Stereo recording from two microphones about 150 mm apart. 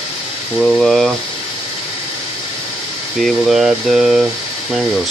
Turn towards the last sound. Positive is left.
turn(degrees=-5)  # may be behind; listen again after turning